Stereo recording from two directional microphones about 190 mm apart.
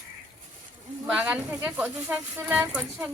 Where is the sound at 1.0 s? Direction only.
5° right (ahead or behind).